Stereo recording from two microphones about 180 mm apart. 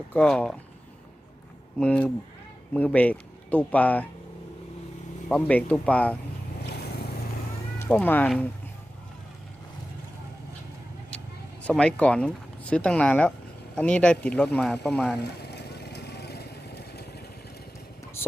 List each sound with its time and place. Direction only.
0.1 s speech: 5° left (ahead or behind)
1.8 s speech: 5° left (ahead or behind)
5.3 s speech: 5° left (ahead or behind)
7.8 s speech: 5° left (ahead or behind)
11.6 s speech: 5° left (ahead or behind)
15.2 s vehicle: 65° left (ahead or behind)
18.2 s a sound: 15° left (ahead or behind)